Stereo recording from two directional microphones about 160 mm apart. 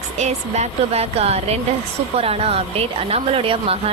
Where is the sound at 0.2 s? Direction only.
45° right (ahead or behind).